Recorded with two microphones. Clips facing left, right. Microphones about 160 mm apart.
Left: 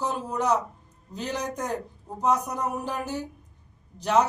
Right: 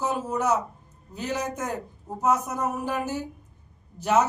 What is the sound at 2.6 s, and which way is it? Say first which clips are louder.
Speech: right 2 dB; 5° right (ahead or behind).